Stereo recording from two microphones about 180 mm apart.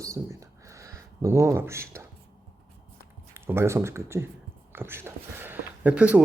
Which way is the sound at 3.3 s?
15° right (ahead or behind).